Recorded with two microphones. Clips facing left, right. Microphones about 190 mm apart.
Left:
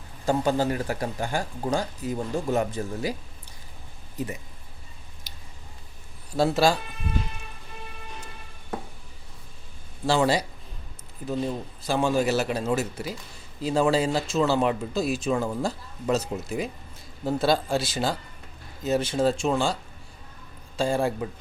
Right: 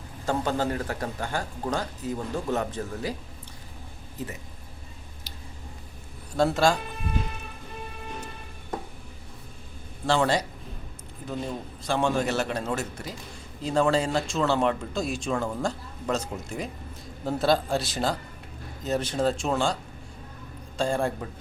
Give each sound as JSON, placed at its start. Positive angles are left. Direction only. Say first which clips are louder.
{"t": 0.3, "sound": "speech", "louder": "left 3 dB", "side_deg": 10}
{"t": 4.2, "sound": "speech", "louder": "left 4 dB", "side_deg": 15}
{"t": 5.3, "sound": "squish", "louder": "right 4 dB", "side_deg": 15}
{"t": 6.3, "sound": "speech", "louder": "left 1 dB", "side_deg": 5}
{"t": 10.1, "sound": "speech", "louder": "left 1 dB", "side_deg": 10}
{"t": 11.8, "sound": "speech", "louder": "left 2 dB", "side_deg": 5}
{"t": 20.7, "sound": "speech", "louder": "left 2 dB", "side_deg": 5}